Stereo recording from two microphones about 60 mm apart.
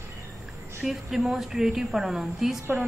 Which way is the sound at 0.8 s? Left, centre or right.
Centre.